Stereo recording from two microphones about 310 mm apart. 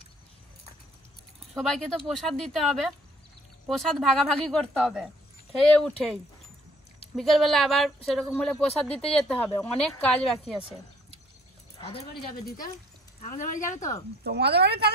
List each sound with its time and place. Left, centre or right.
1.5 s speech: centre
7.2 s speech: centre
11.8 s speech: centre
12.1 s speech: left
14.2 s speech: right